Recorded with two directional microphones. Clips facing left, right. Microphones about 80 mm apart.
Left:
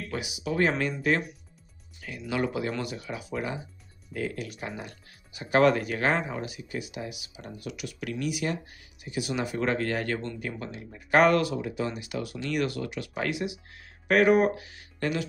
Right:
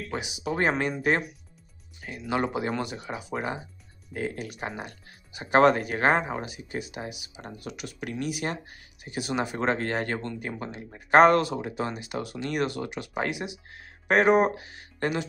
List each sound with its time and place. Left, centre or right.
0.1 s speech: right
2.0 s speech: right